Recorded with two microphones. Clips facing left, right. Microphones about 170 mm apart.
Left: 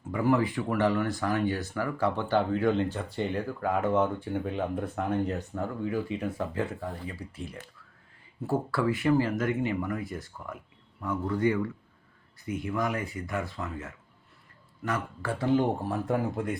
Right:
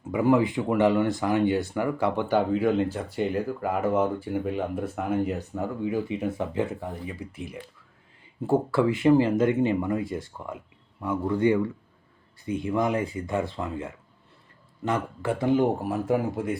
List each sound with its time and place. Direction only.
0.1 s speech: 15° right (ahead or behind)